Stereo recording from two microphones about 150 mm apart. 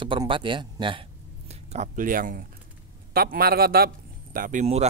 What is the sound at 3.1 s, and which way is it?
A man's voice, 85° right.